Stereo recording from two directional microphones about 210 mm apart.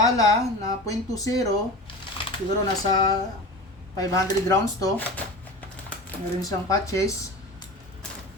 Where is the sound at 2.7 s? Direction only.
20° left (ahead or behind).